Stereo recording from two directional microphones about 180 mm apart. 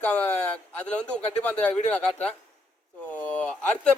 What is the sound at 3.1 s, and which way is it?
Speech, 10° left (ahead or behind).